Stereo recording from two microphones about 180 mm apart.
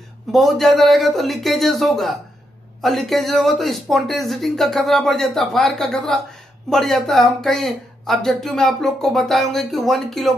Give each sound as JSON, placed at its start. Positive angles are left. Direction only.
{"t": 0.3, "sound": "a woman's voice", "side_deg": 0}